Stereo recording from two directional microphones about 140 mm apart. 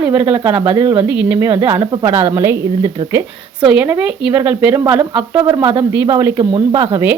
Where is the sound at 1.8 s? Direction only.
35° right (ahead or behind).